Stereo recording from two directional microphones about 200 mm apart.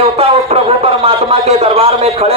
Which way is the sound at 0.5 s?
30° right (ahead or behind).